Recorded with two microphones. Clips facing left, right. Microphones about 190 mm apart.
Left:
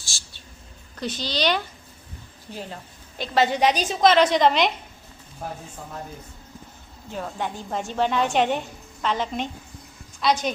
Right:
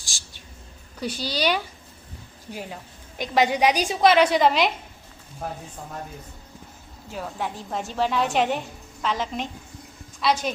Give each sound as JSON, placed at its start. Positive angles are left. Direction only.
{"t": 0.0, "sound": "a sound", "side_deg": -15}
{"t": 0.9, "sound": "a woman's voice", "side_deg": -10}
{"t": 7.1, "sound": "a woman's voice", "side_deg": -5}